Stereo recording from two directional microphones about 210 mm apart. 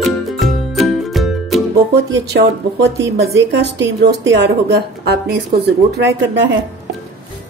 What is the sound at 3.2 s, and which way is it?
A woman's voice, 50° right (ahead or behind).